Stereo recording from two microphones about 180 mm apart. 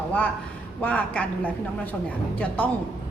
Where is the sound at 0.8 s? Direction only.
10° left (ahead or behind).